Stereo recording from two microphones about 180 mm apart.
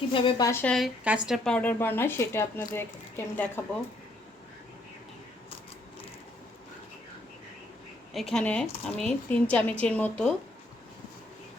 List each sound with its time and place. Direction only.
0.1 s speech: 20° left (ahead or behind)
0.6 s speech: 5° left (ahead or behind)
8.1 s speech: centre (ahead or behind)